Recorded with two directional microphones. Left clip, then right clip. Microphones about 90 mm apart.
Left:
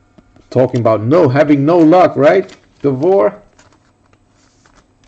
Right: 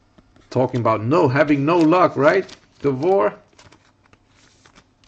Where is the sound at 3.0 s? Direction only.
5° left (ahead or behind).